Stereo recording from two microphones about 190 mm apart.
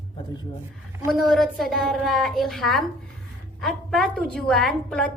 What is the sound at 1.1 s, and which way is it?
A woman's voice, centre (ahead or behind).